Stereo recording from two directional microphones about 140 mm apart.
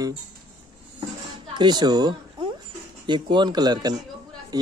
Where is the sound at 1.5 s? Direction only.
30° right (ahead or behind).